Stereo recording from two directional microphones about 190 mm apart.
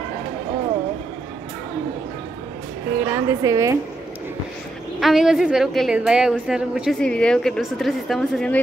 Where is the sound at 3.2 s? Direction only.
15° right (ahead or behind).